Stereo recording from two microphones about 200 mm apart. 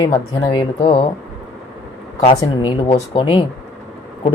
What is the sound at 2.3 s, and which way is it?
Speech, 25° left (ahead or behind).